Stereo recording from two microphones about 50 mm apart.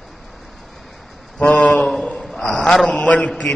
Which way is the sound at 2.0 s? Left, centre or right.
Left.